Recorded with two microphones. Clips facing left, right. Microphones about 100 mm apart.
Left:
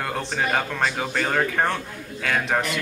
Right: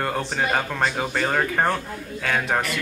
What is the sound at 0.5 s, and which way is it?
Speech, 5° right (ahead or behind).